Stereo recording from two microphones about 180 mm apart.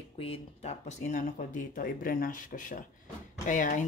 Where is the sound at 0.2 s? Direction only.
35° left (ahead or behind).